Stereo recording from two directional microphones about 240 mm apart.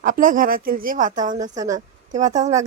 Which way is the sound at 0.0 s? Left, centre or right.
Right.